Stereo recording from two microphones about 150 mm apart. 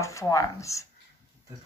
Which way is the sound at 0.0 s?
20° left (ahead or behind).